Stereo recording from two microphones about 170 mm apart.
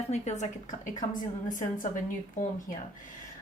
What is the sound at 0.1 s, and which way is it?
Speech, 45° left (ahead or behind).